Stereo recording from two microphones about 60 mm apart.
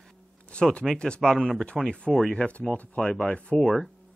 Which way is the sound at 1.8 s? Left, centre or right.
Centre.